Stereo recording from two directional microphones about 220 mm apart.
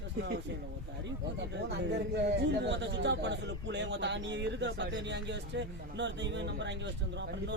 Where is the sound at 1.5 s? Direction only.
50° right (ahead or behind).